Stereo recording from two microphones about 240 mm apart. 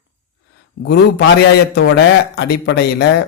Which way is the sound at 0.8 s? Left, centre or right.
Left.